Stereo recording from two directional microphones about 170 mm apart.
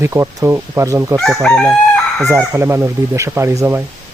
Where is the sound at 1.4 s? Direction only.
5° left (ahead or behind).